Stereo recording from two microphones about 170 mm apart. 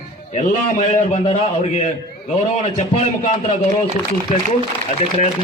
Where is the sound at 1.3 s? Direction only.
35° left (ahead or behind).